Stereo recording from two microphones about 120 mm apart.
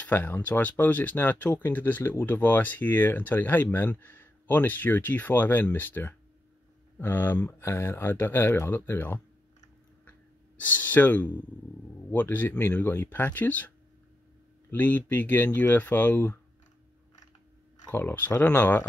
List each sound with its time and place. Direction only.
0.0 s speech: 15° left (ahead or behind)
10.6 s speech: 15° left (ahead or behind)
17.8 s speech: 15° left (ahead or behind)